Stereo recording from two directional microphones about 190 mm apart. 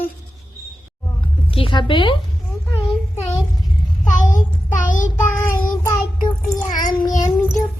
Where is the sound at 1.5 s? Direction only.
30° left (ahead or behind).